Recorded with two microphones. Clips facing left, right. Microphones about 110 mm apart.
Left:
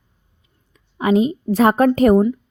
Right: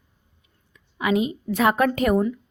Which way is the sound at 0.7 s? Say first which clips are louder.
Left 6 dB; 35° left (ahead or behind).